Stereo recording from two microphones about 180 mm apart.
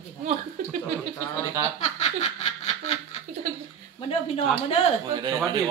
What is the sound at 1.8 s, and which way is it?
Snicker, 40° left (ahead or behind).